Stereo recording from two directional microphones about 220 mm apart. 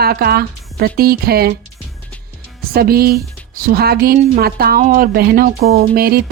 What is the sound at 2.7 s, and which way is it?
A woman's voice, 45° right (ahead or behind).